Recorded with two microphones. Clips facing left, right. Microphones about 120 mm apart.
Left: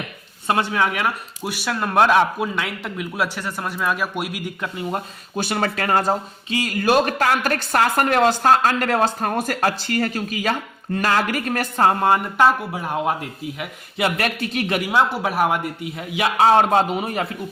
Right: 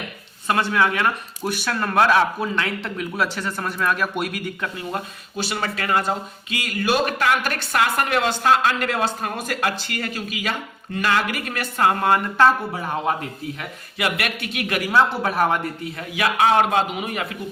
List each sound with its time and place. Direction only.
0.4 s speech: 25° left (ahead or behind)
0.8 s a man's voice: 10° left (ahead or behind)
5.4 s speech: 45° left (ahead or behind); by 12.5 s 20° left (ahead or behind)
12.7 s a man's voice: 5° left (ahead or behind)
14.0 s speech: 35° left (ahead or behind)
14.8 s a man's voice: 15° left (ahead or behind)
16.2 s speech: 30° left (ahead or behind)